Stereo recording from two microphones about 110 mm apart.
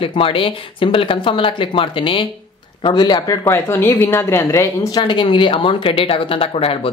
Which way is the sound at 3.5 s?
20° left (ahead or behind).